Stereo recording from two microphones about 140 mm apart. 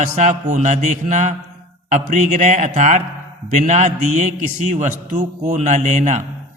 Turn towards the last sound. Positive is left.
turn(degrees=-55)  # may be behind; listen again after turning